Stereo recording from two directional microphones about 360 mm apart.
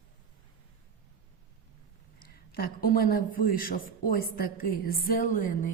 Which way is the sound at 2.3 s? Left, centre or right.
Left.